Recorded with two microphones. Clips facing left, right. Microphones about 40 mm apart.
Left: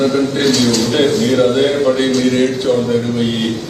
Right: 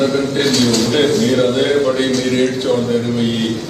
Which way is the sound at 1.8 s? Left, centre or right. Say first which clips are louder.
Left 2 dB; centre.